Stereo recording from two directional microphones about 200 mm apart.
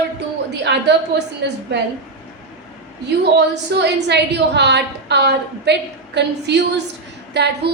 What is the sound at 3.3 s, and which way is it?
A woman's voice, 60° right (ahead or behind).